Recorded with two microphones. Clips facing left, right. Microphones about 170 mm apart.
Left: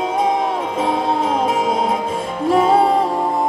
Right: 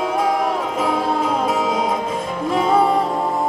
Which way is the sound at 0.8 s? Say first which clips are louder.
Left 2 dB; 25° left (ahead or behind).